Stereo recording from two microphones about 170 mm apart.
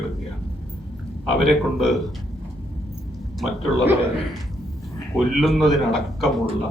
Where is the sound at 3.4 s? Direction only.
Centre (ahead or behind).